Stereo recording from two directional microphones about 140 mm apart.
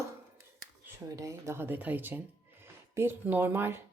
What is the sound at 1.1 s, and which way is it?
Speech, 20° right (ahead or behind).